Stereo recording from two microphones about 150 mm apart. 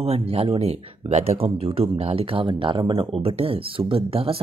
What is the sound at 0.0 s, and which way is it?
Speech, 40° right (ahead or behind).